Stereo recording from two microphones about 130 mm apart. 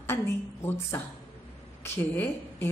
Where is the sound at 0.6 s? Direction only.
20° left (ahead or behind).